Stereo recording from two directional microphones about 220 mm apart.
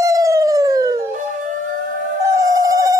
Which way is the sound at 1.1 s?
35° right (ahead or behind).